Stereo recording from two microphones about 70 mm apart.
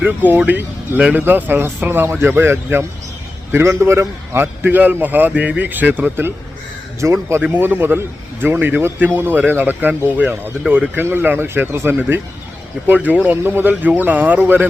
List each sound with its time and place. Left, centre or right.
0.0 s a man's voice: right
7.0 s speech: right
7.4 s a man's voice: right